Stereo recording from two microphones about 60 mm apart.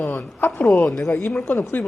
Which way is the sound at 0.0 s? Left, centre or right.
Left.